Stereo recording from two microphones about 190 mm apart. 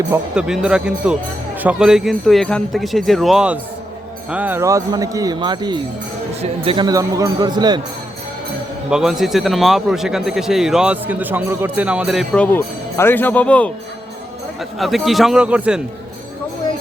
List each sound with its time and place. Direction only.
0.1 s a man's voice: 5° right (ahead or behind); by 7.8 s 20° right (ahead or behind)
8.9 s a man's voice: 5° right (ahead or behind)